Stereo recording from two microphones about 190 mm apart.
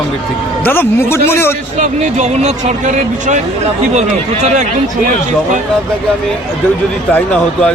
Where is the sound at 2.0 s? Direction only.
35° right (ahead or behind).